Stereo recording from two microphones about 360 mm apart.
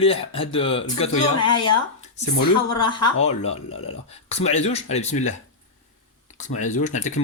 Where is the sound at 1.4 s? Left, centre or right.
Left.